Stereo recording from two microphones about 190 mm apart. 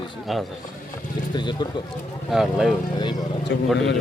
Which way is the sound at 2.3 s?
Centre (ahead or behind).